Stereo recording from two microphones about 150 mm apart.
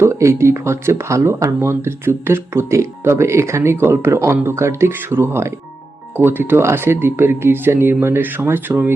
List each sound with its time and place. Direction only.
0.0 s speech: 20° right (ahead or behind)